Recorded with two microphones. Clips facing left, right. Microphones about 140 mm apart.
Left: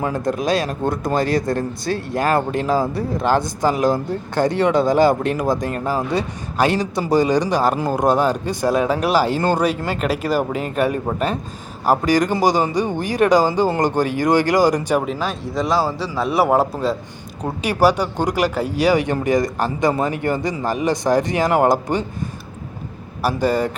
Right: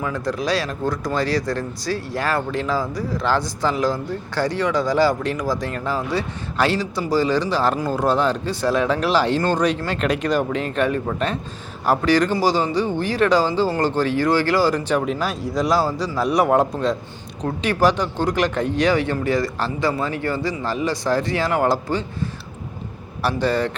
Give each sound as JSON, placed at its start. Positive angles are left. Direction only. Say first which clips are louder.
{"t": 0.4, "sound": "speech", "louder": "left 3 dB", "side_deg": 50}
{"t": 0.7, "sound": "a man's voice", "louder": "left 2 dB", "side_deg": 25}
{"t": 1.1, "sound": "speech", "louder": "left 4 dB", "side_deg": 50}
{"t": 4.4, "sound": "a man's voice", "louder": "left 4 dB", "side_deg": 25}
{"t": 4.9, "sound": "speech", "louder": "left 3 dB", "side_deg": 55}
{"t": 6.0, "sound": "a man's voice", "louder": "left 2 dB", "side_deg": 20}
{"t": 12.0, "sound": "speech", "louder": "even", "side_deg": 15}
{"t": 15.0, "sound": "a man's voice", "louder": "even", "side_deg": 0}
{"t": 23.2, "sound": "speech", "louder": "left 2 dB", "side_deg": 10}